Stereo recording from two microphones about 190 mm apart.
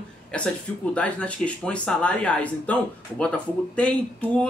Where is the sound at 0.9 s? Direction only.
5° left (ahead or behind).